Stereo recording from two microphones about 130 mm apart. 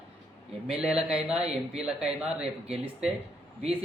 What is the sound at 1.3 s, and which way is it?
Speech, 55° right (ahead or behind).